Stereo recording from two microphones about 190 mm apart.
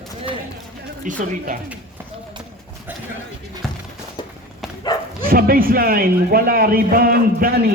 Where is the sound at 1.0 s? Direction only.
45° right (ahead or behind).